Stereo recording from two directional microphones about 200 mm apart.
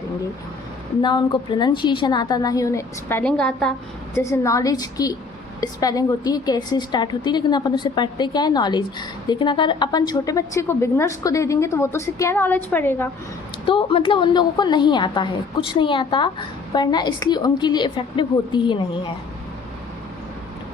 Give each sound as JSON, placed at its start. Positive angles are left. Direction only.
{"t": 1.0, "sound": "a woman's voice", "side_deg": 20}
{"t": 4.2, "sound": "a woman's voice", "side_deg": 15}
{"t": 13.7, "sound": "a woman's voice", "side_deg": 25}